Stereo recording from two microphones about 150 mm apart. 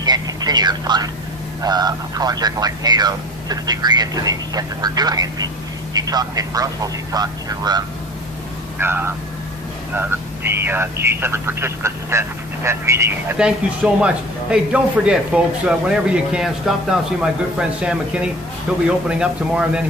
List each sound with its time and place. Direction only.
0.0 s vehicle: 25° right (ahead or behind)
1.6 s speech: 25° right (ahead or behind)
8.8 s speech: 15° right (ahead or behind)